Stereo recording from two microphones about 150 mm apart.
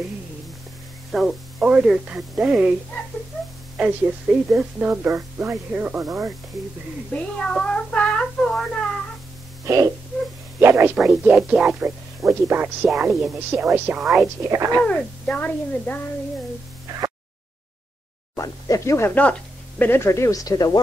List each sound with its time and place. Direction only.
1.1 s speech: 5° right (ahead or behind)
3.7 s speech: 10° right (ahead or behind)
7.2 s speech: 5° left (ahead or behind)
9.7 s speech: 20° right (ahead or behind)
14.2 s speech: 20° right (ahead or behind)
14.8 s speech: 10° left (ahead or behind)
18.3 s speech: 20° left (ahead or behind)